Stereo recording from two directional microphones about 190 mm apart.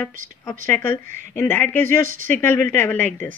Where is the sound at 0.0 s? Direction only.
15° left (ahead or behind).